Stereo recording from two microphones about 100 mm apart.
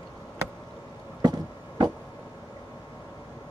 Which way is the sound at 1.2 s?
40° right (ahead or behind).